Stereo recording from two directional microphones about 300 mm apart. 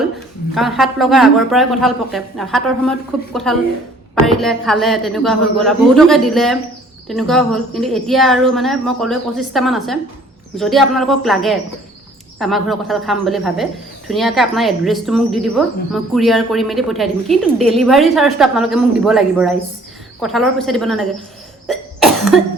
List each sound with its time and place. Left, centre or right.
0.5 s speech: centre
21.7 s cough: centre